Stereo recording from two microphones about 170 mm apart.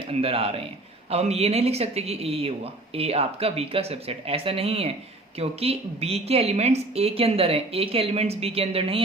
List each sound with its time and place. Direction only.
0.1 s a woman's voice: 35° right (ahead or behind)